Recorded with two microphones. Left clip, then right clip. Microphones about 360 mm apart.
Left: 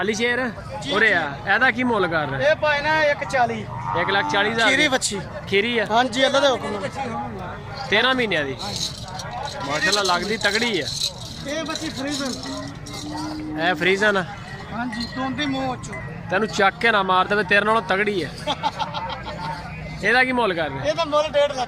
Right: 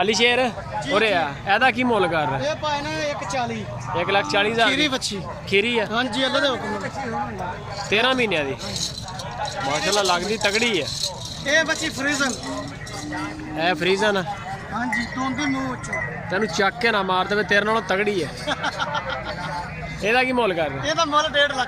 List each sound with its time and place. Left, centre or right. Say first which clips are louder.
0.0 s speech: right 4 dB; centre
2.4 s speech: left 5 dB; left
3.9 s speech: even; centre
4.7 s a man's voice: left 3 dB; centre
5.5 s speech: even; centre
5.9 s a man's voice: left 4 dB; centre
7.9 s speech: left 1 dB; centre
13.6 s speech: left 1 dB; centre
16.3 s speech: left 3 dB; centre
18.4 s a sound: left 1 dB; centre
20.0 s speech: left 1 dB; centre
20.8 s a man's voice: even; centre